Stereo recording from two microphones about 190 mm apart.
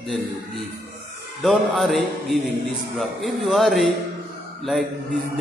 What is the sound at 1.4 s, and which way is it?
A man's voice, centre (ahead or behind).